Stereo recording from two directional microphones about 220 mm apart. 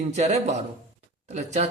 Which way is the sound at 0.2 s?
30° right (ahead or behind).